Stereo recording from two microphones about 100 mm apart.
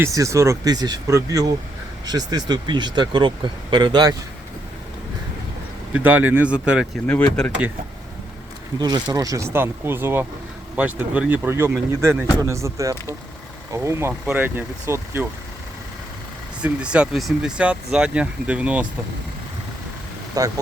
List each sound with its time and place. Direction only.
0.0 s speech: 30° right (ahead or behind); by 4.1 s 45° right (ahead or behind)
5.9 s speech: 20° right (ahead or behind)
7.1 s speech: 10° left (ahead or behind)
8.8 s speech: 45° right (ahead or behind); by 11.3 s 15° right (ahead or behind)
11.4 s speech: 25° right (ahead or behind)
14.1 s speech: 15° right (ahead or behind)
16.6 s speech: 10° right (ahead or behind)
20.4 s speech: 35° right (ahead or behind)